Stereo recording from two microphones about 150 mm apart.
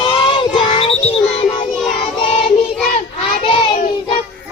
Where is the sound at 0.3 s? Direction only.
35° left (ahead or behind).